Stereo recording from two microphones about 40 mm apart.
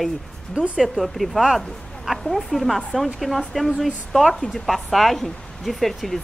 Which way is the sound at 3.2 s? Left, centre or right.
Centre.